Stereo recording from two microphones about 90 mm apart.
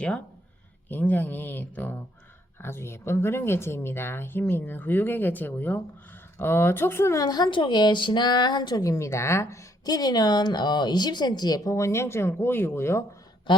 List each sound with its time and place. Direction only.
0.9 s speech: 20° left (ahead or behind)
9.8 s speech: 50° left (ahead or behind); by 13.1 s 30° left (ahead or behind)